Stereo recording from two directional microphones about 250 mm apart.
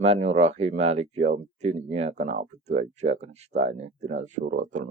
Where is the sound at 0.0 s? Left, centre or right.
Right.